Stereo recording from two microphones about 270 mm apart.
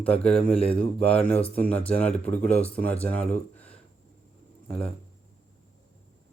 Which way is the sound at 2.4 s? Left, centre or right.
Centre.